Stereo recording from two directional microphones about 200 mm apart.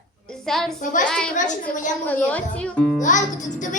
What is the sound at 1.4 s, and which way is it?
Music, 40° left (ahead or behind).